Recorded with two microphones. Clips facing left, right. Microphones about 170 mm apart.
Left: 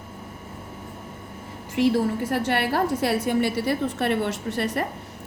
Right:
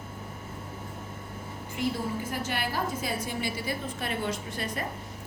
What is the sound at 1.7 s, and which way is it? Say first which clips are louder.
A woman's voice: left 10 dB; 75° left (ahead or behind).